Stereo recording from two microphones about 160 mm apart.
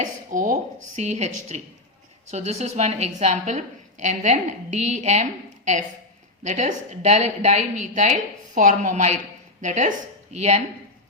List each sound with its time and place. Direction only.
0.0 s a sound: 55° right (ahead or behind)
0.9 s a woman's voice: 45° right (ahead or behind)
6.4 s a woman's voice: 50° right (ahead or behind)